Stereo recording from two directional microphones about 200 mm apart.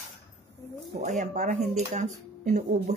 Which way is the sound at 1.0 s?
35° right (ahead or behind).